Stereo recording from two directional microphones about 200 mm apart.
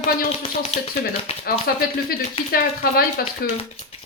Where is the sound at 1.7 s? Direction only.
50° left (ahead or behind).